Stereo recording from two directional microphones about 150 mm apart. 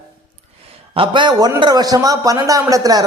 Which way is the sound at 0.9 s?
35° right (ahead or behind).